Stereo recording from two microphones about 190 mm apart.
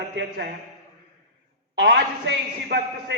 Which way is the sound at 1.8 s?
65° right (ahead or behind).